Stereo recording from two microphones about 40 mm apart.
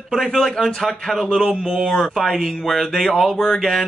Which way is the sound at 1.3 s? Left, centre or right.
Centre.